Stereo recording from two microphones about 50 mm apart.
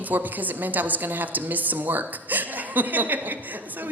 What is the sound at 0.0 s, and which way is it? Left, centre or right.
A woman's voice, right.